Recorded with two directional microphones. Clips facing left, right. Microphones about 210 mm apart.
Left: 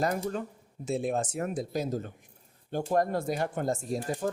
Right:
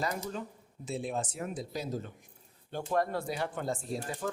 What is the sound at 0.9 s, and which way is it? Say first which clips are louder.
Speech: left 5 dB; 45° left (ahead or behind).